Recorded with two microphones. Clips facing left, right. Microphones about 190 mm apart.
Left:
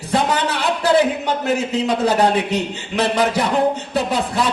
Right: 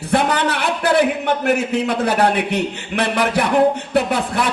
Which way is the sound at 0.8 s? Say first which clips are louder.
Even; 60° right (ahead or behind).